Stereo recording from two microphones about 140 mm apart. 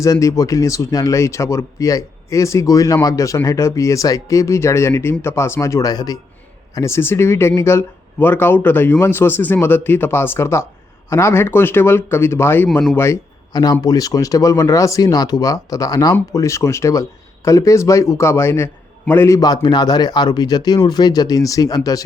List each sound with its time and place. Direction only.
0.0 s speech: 25° left (ahead or behind)